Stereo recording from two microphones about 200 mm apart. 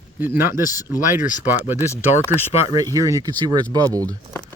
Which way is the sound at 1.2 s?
40° left (ahead or behind).